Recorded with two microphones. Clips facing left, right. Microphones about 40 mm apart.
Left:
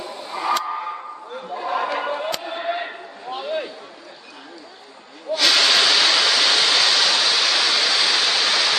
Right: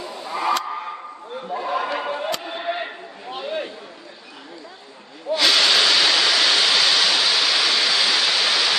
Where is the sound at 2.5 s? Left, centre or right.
Centre.